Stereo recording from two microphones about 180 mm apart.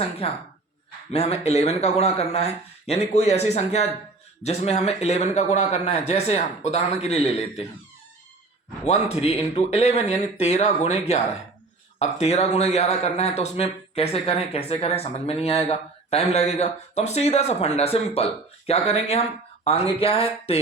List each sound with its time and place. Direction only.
0.2 s speech: 35° left (ahead or behind)
8.9 s speech: 35° left (ahead or behind)